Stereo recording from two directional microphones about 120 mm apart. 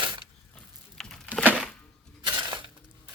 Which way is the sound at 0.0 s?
40° right (ahead or behind).